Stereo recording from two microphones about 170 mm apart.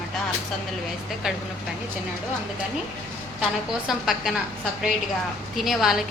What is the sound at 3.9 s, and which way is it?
Speech, centre (ahead or behind).